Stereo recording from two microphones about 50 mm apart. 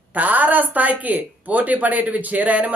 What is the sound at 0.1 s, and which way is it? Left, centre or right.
Speech, right.